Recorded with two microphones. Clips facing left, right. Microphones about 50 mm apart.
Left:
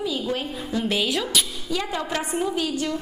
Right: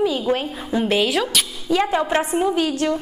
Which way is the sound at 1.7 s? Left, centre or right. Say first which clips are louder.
Right 9 dB; right.